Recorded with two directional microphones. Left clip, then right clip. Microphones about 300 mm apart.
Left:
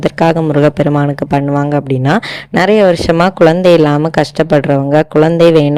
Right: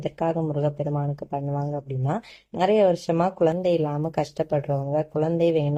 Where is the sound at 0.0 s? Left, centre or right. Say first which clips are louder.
Left 14 dB; left.